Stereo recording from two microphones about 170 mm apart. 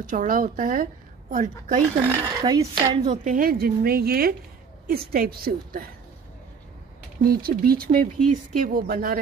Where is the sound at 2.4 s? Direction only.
25° right (ahead or behind).